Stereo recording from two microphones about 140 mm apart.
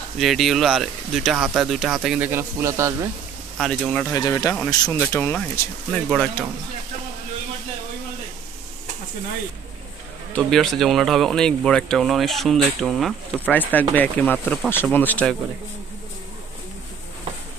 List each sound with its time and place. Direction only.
0.2 s speech: centre (ahead or behind); by 3.1 s 20° right (ahead or behind)
3.5 s speech: 5° left (ahead or behind)
4.1 s speech: 25° left (ahead or behind)
5.0 s speech: 15° left (ahead or behind)
10.3 s speech: 5° left (ahead or behind)
13.5 s speech: 10° left (ahead or behind)